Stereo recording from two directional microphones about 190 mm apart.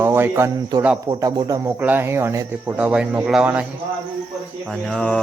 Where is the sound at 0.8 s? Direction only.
15° right (ahead or behind).